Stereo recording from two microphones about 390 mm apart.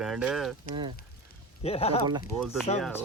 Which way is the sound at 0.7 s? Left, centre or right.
Centre.